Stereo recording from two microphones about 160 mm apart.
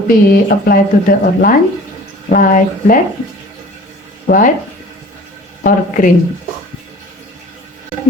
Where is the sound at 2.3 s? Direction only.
60° left (ahead or behind).